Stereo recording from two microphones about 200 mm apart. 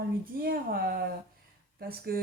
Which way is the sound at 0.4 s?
50° right (ahead or behind).